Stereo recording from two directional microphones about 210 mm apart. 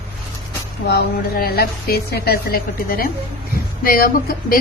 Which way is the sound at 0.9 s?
45° left (ahead or behind).